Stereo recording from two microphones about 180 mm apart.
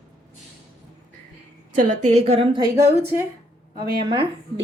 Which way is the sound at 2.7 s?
15° right (ahead or behind).